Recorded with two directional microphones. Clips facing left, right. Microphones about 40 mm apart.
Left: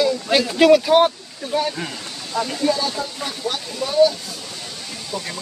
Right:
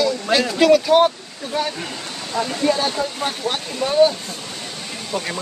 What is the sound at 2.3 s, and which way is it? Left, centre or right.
Speech, right.